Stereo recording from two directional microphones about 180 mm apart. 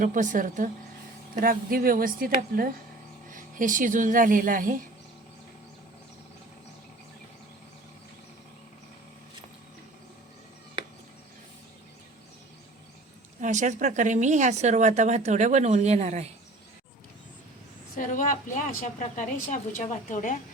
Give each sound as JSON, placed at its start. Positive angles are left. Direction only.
{"t": 0.0, "sound": "a woman's voice", "side_deg": -45}
{"t": 13.4, "sound": "speech", "side_deg": -40}
{"t": 17.9, "sound": "a woman's voice", "side_deg": 50}